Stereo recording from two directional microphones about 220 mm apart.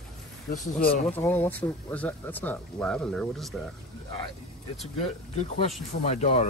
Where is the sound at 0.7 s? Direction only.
40° left (ahead or behind).